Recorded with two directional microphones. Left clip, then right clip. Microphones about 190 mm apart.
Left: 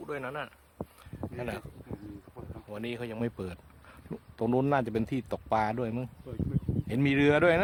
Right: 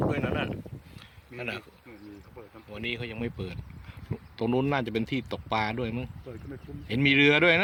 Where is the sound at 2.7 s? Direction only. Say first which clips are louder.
Right 3 dB; 20° left (ahead or behind).